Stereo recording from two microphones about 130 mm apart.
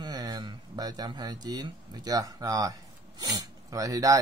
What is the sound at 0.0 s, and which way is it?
Speech, 30° right (ahead or behind).